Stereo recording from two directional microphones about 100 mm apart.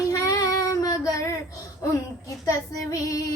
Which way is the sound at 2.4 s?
35° left (ahead or behind).